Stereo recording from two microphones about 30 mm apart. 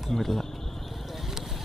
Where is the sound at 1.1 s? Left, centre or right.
Centre.